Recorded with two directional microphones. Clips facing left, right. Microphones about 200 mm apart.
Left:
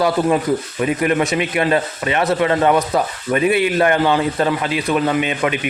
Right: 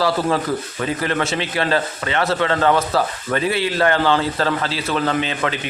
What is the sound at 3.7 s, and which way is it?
Speech, 20° left (ahead or behind).